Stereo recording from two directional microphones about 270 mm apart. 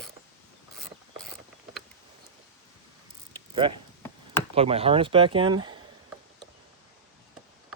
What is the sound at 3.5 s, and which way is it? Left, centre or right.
Speech, centre.